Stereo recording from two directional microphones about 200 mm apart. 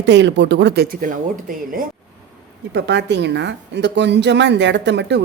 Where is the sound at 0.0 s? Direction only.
60° right (ahead or behind); by 1.8 s 40° right (ahead or behind).